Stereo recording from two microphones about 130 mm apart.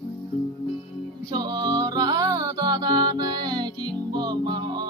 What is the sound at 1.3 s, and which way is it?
Music, 35° right (ahead or behind).